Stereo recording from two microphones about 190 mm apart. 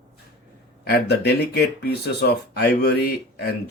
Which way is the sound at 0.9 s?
60° left (ahead or behind).